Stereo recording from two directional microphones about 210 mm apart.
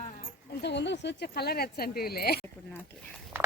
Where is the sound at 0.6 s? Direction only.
55° left (ahead or behind).